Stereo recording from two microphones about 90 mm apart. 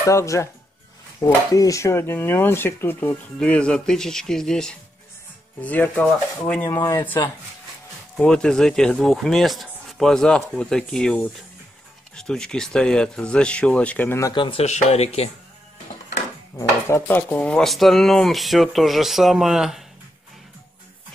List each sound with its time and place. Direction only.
0.0 s speech: 35° left (ahead or behind)
3.3 s speech: 10° left (ahead or behind)
5.6 s speech: 20° left (ahead or behind)
6.7 s speech: 30° left (ahead or behind)
8.2 s speech: 10° left (ahead or behind)
14.3 s speech: 65° left (ahead or behind)
16.5 s speech: 30° left (ahead or behind)
17.1 s speech: 15° left (ahead or behind)
17.6 s speech: centre (ahead or behind)